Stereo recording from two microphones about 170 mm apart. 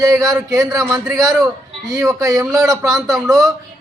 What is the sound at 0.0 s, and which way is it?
Speech, 20° right (ahead or behind).